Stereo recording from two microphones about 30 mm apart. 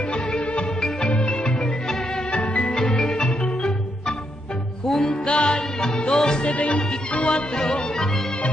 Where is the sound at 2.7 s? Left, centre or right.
Left.